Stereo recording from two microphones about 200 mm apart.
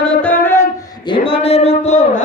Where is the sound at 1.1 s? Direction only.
25° left (ahead or behind).